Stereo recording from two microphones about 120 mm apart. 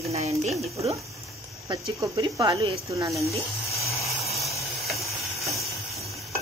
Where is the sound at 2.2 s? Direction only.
35° right (ahead or behind).